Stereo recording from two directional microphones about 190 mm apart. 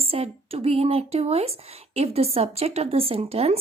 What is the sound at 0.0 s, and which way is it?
A woman's voice, 30° right (ahead or behind).